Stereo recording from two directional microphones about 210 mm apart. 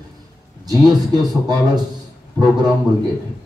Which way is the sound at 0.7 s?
20° right (ahead or behind).